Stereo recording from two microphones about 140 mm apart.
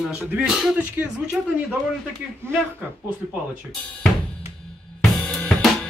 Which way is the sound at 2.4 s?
15° right (ahead or behind).